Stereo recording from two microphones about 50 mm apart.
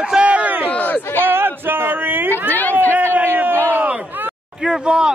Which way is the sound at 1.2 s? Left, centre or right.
Right.